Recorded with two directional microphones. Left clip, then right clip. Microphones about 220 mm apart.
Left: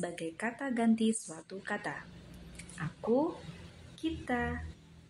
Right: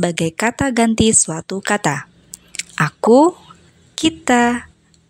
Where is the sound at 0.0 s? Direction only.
40° right (ahead or behind).